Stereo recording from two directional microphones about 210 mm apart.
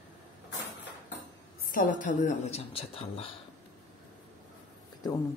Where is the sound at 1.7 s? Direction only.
40° left (ahead or behind).